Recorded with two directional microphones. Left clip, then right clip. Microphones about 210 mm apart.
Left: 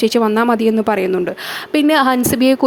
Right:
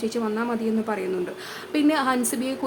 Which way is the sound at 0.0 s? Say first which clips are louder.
Left 13 dB; 45° left (ahead or behind).